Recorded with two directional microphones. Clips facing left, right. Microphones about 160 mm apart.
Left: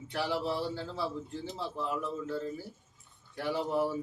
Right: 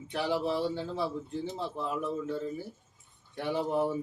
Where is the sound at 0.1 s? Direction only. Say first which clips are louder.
Right 2 dB; 20° right (ahead or behind).